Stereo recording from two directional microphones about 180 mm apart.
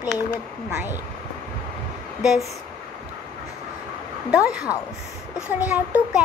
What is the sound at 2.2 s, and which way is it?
Speech, centre (ahead or behind).